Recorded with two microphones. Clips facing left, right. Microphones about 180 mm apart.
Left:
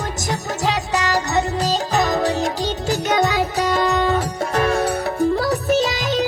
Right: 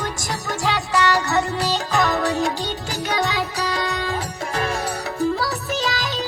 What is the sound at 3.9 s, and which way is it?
Music, 60° left (ahead or behind).